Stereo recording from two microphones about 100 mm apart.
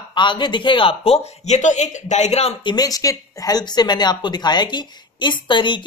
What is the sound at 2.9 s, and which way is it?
Speech, 35° left (ahead or behind).